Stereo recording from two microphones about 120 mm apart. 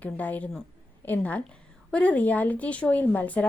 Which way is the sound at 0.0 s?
15° left (ahead or behind).